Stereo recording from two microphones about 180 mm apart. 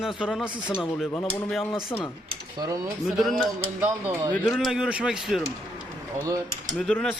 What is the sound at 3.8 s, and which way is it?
Speech, 10° right (ahead or behind).